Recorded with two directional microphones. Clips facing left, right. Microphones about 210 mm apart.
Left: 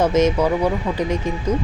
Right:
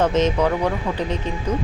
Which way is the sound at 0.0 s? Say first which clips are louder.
Left 2 dB; 10° left (ahead or behind).